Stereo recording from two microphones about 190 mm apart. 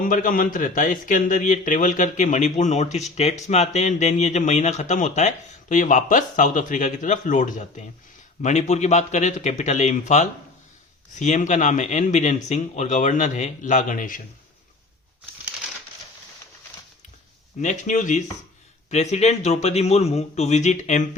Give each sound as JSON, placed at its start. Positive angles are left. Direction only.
{"t": 0.0, "sound": "a man's voice", "side_deg": 45}
{"t": 17.6, "sound": "a man's voice", "side_deg": 40}